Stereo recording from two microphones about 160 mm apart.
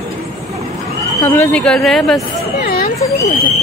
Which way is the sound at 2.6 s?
70° left (ahead or behind).